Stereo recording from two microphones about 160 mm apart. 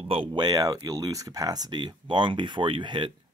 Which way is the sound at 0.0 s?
35° right (ahead or behind).